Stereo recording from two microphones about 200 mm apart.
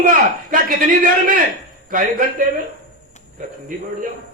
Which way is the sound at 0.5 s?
45° right (ahead or behind).